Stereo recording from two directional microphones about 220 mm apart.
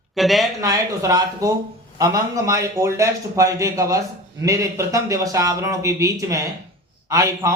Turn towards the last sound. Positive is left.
turn(degrees=-15)  # may be behind; listen again after turning